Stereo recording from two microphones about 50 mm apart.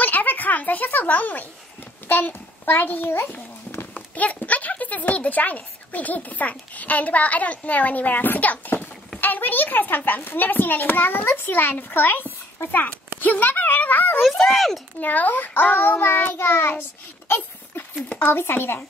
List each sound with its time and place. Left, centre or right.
0.0 s a sound: left
2.0 s a child's voice: left
3.7 s a sound: left
4.1 s a child's voice: left
12.7 s a child's voice: left
14.2 s speech: centre
15.0 s a child's voice: left
17.8 s a sound: left
18.2 s speech: left